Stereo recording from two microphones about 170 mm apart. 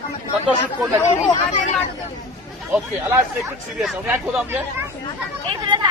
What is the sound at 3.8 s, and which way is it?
Speech, centre (ahead or behind).